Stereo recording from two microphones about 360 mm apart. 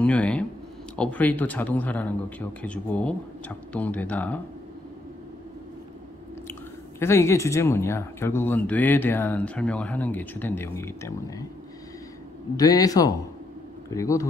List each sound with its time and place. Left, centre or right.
0.0 s speech: centre
7.0 s speech: centre
12.5 s a man's voice: centre